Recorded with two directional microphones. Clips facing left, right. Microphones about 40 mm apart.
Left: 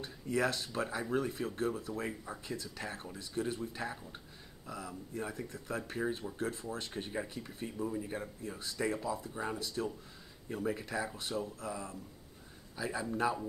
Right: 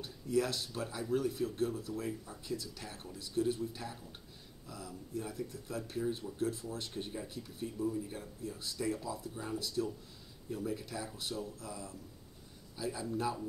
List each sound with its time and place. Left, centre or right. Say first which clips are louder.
0.3 s speech: even; left